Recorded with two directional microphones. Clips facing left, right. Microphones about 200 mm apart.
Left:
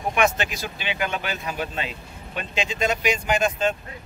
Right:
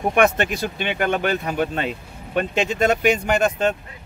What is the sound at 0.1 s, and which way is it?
Speech, 55° right (ahead or behind).